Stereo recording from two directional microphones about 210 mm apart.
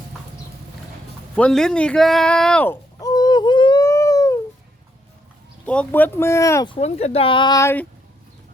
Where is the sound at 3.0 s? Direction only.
20° left (ahead or behind).